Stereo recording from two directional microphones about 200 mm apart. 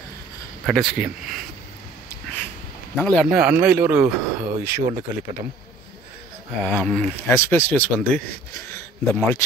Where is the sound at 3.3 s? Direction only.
10° right (ahead or behind).